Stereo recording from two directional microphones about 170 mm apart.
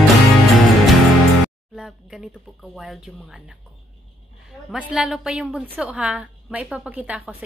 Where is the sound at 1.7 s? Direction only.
5° right (ahead or behind).